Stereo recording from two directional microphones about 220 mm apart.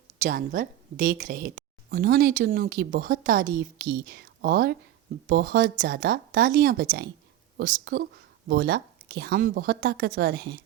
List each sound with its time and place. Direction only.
0.2 s a woman's voice: 35° right (ahead or behind)